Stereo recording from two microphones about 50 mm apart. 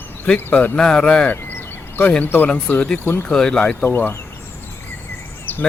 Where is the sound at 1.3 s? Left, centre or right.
Left.